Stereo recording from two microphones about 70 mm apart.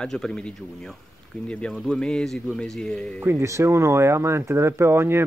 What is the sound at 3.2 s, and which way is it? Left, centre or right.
Speech, right.